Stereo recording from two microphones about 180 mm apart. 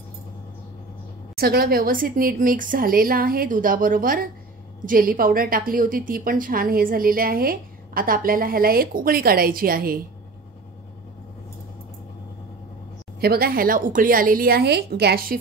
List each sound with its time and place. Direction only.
1.3 s a woman's voice: 55° right (ahead or behind)
13.2 s a woman's voice: 60° right (ahead or behind)